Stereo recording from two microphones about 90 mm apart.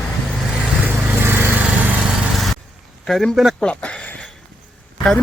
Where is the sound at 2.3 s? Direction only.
Centre (ahead or behind).